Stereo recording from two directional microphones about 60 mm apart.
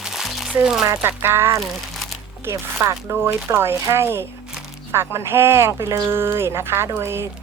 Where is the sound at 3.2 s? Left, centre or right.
Right.